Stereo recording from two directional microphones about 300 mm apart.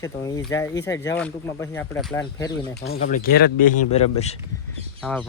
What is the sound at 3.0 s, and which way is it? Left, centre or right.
Speech, left.